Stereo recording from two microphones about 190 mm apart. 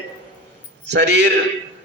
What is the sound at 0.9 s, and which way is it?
Speech, 65° right (ahead or behind).